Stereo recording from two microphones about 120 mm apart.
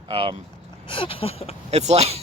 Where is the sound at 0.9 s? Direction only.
50° left (ahead or behind).